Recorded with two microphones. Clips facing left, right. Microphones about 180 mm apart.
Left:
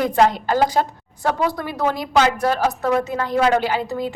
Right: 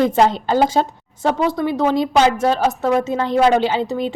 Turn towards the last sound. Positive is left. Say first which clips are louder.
# right 3 dB
turn(degrees=-25)  # may be behind; listen again after turning